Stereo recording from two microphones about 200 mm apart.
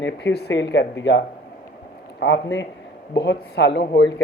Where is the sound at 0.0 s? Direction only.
60° left (ahead or behind).